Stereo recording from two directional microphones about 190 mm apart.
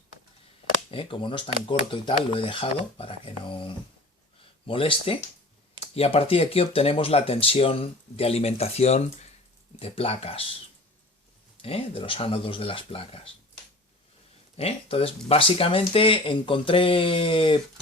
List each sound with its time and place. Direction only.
0.9 s speech: 30° left (ahead or behind)
11.6 s speech: 30° left (ahead or behind)
14.5 s speech: 30° left (ahead or behind)